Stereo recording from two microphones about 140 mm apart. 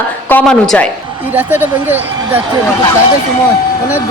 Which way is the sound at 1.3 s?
15° right (ahead or behind).